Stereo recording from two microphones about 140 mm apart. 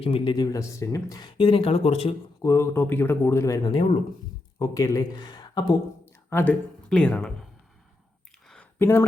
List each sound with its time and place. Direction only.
0.0 s speech: 40° left (ahead or behind)
0.3 s speech: 25° left (ahead or behind); by 2.1 s 45° left (ahead or behind)
2.4 s speech: 20° left (ahead or behind)
6.3 s speech: 10° left (ahead or behind)
8.8 s speech: 15° left (ahead or behind)